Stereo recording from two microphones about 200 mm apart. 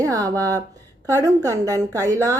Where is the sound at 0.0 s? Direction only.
15° right (ahead or behind).